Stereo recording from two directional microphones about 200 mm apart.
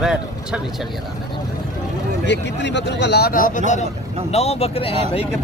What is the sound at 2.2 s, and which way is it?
Speech, 60° left (ahead or behind).